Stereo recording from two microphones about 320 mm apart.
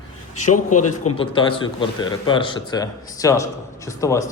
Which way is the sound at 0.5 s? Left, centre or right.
Left.